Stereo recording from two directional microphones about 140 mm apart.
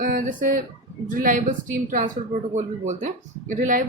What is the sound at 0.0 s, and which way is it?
A woman's voice, 80° right.